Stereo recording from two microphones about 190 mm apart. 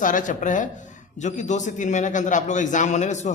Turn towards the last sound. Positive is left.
turn(degrees=40)  # may be behind; listen again after turning